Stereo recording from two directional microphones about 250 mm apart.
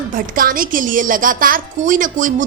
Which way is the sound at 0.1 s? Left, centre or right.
Right.